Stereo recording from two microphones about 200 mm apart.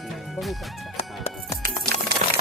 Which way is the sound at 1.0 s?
30° left (ahead or behind).